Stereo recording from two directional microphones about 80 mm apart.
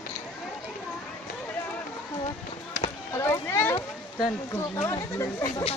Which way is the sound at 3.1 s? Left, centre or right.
Left.